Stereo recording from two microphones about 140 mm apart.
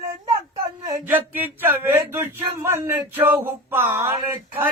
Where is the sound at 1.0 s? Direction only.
15° right (ahead or behind).